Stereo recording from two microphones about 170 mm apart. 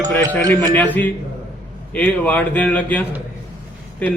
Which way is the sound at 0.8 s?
10° left (ahead or behind).